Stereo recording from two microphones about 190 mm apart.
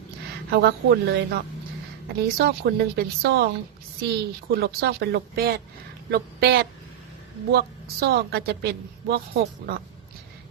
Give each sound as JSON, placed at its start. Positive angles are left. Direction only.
{"t": 0.5, "sound": "a woman's voice", "side_deg": -60}
{"t": 2.4, "sound": "a woman's voice", "side_deg": -60}